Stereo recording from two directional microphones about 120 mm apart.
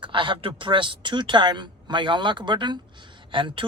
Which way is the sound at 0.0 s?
45° right (ahead or behind).